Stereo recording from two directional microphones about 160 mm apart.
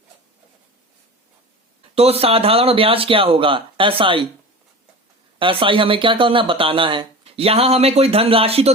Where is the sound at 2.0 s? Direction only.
40° right (ahead or behind).